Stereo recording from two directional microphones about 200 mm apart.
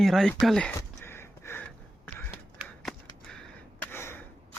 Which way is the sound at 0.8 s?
10° left (ahead or behind).